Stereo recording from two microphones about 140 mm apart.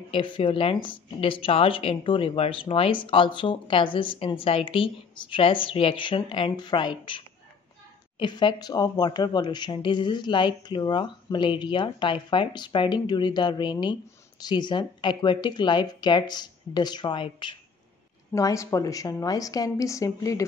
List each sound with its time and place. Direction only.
0.1 s speech: 35° left (ahead or behind)
18.3 s a woman's voice: 20° left (ahead or behind)